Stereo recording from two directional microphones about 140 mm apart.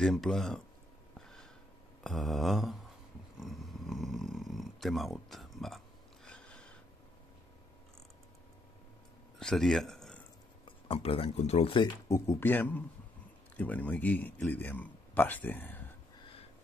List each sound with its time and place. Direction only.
0.0 s a sound: centre (ahead or behind)
3.3 s snoring: centre (ahead or behind)
6.2 s a sound: 5° left (ahead or behind)
9.4 s speech: 5° left (ahead or behind)
10.6 s speech: 40° left (ahead or behind)
12.1 s speech: 15° left (ahead or behind)